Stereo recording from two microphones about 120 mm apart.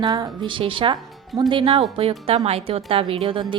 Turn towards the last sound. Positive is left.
turn(degrees=-45)  # may be behind; listen again after turning